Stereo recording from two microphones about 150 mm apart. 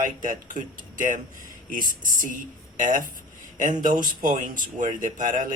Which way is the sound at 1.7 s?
65° right (ahead or behind).